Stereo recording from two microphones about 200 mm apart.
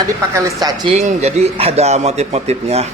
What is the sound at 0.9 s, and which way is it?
Speech, 35° right (ahead or behind).